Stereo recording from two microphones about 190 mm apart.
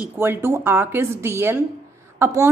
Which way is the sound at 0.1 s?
10° right (ahead or behind).